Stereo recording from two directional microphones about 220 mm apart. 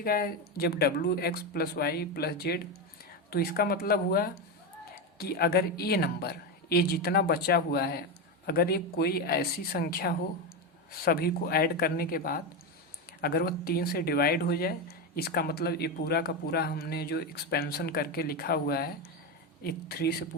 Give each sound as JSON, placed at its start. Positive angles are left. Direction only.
{"t": 0.0, "sound": "speech", "side_deg": 40}